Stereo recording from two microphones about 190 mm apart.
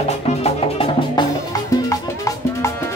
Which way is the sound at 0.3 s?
30° left (ahead or behind).